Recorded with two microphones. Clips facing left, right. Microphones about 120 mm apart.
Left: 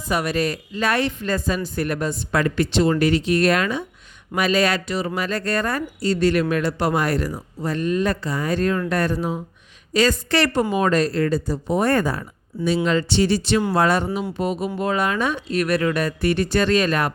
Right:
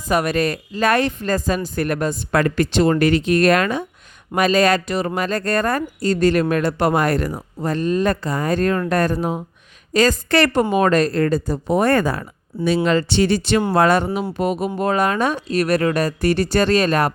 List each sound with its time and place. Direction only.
0.1 s speech: 50° right (ahead or behind)
7.7 s speech: 35° right (ahead or behind)
8.0 s speech: 50° right (ahead or behind); by 14.7 s 65° right (ahead or behind)
14.8 s speech: 45° right (ahead or behind)